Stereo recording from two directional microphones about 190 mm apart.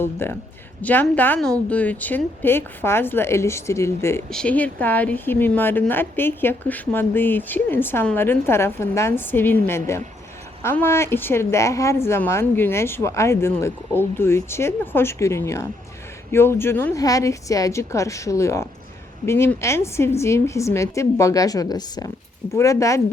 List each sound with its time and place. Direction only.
0.0 s a woman's voice: 10° left (ahead or behind)